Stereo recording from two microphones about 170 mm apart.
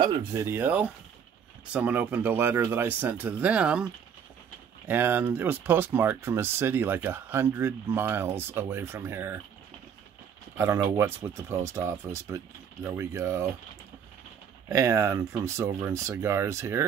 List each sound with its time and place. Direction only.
0.0 s speech: 20° right (ahead or behind)
10.6 s speech: 15° right (ahead or behind)
14.7 s speech: 15° right (ahead or behind)